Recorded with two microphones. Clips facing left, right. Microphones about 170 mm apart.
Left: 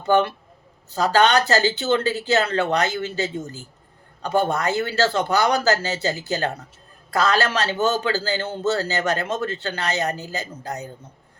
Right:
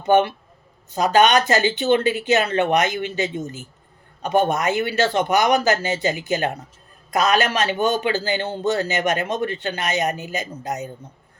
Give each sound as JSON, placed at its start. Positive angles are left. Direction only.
{"t": 0.0, "sound": "a man's voice", "side_deg": -20}